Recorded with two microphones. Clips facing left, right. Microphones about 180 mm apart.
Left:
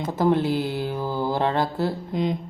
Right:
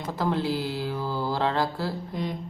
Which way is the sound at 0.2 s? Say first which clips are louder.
Left 6 dB; 20° left (ahead or behind).